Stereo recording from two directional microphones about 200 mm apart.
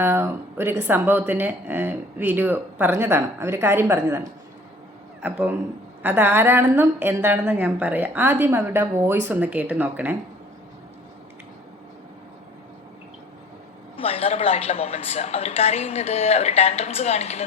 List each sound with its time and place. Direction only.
0.0 s speech: 10° right (ahead or behind)
5.2 s speech: 10° right (ahead or behind)
13.9 s a woman's voice: 30° left (ahead or behind)